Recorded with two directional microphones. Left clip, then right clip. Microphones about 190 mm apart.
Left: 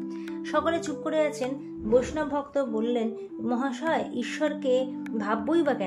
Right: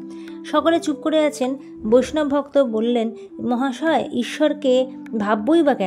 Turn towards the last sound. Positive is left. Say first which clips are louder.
# right 8 dB
turn(degrees=-45)  # may be behind; listen again after turning